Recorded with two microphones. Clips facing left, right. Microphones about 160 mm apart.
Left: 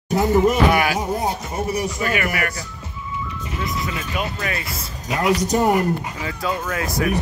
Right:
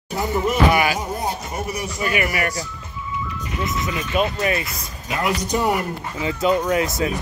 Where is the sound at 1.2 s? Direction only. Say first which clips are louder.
Left 2 dB; 30° left (ahead or behind).